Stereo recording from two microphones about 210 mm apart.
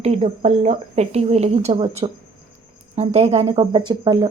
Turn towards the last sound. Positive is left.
turn(degrees=-20)  # may be behind; listen again after turning